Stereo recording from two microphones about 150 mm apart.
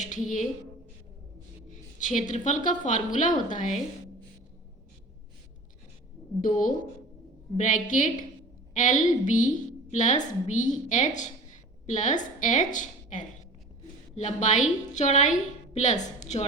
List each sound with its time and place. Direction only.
0.0 s a woman's voice: 55° left (ahead or behind)
2.0 s a woman's voice: 55° left (ahead or behind)
6.4 s a woman's voice: 65° left (ahead or behind)